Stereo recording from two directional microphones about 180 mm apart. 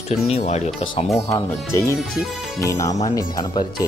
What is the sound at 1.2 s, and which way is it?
Speech, 20° left (ahead or behind).